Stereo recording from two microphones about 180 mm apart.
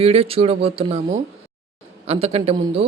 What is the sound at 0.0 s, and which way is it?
A woman's voice, 35° right (ahead or behind).